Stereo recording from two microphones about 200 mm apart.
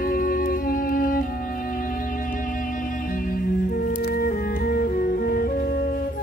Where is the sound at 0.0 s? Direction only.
45° left (ahead or behind).